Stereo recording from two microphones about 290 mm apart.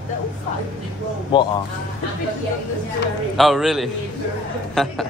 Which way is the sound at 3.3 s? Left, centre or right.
Centre.